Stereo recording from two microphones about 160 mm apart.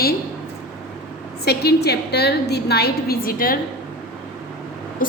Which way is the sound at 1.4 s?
90° left.